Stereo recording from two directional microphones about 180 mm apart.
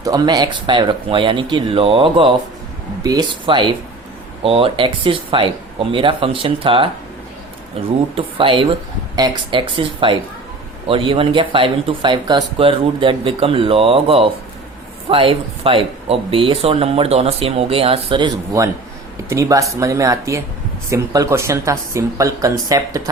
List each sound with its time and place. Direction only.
0.0 s speech: 20° right (ahead or behind)
8.1 s speech: 30° right (ahead or behind)